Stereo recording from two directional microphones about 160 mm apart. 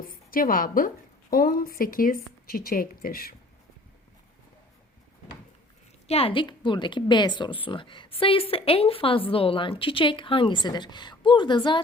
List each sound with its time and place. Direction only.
0.0 s a sound: 60° left (ahead or behind)
1.3 s speech: 65° left (ahead or behind)
6.1 s a woman's voice: 35° left (ahead or behind)